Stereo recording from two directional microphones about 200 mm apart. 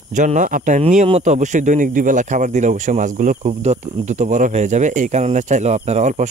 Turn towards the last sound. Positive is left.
turn(degrees=-35)  # may be behind; listen again after turning